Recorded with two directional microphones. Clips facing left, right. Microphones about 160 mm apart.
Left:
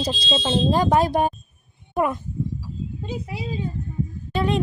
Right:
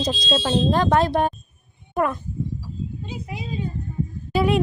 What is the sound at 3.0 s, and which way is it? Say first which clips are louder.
Speech: left 3 dB; 30° left (ahead or behind).